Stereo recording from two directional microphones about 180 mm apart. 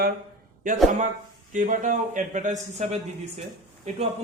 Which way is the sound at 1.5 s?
45° right (ahead or behind).